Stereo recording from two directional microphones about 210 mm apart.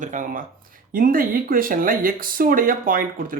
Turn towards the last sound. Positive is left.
turn(degrees=-40)  # may be behind; listen again after turning